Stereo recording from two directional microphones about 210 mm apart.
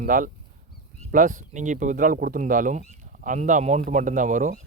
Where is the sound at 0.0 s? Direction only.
40° right (ahead or behind).